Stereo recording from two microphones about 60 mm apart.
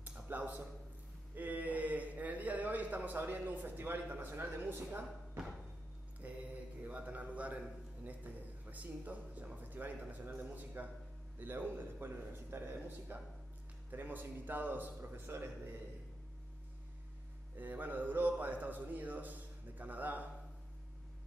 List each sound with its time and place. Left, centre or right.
0.3 s a man's voice: right
6.2 s mantra: right
8.0 s a man's voice: right
17.6 s speech: right